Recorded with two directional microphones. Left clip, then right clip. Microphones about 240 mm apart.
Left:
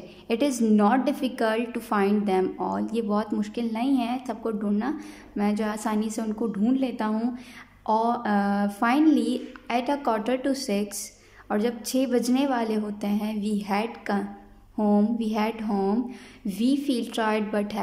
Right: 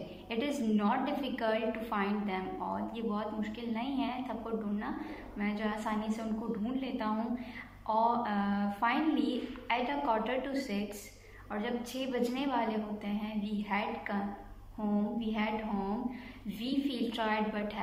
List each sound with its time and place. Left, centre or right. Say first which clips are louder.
0.3 s a woman's voice: left 10 dB; left